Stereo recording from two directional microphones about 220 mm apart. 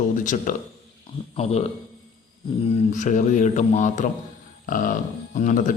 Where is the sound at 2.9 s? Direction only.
35° left (ahead or behind).